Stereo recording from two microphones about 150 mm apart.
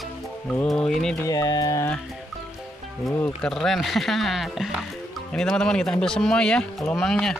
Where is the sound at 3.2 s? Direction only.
5° left (ahead or behind).